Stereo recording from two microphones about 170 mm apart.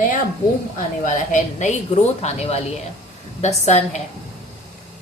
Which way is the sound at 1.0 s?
45° left (ahead or behind).